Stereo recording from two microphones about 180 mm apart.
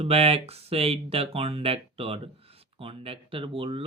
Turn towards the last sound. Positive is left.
turn(degrees=-30)  # may be behind; listen again after turning